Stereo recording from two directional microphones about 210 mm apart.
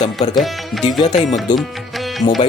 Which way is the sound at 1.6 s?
Centre (ahead or behind).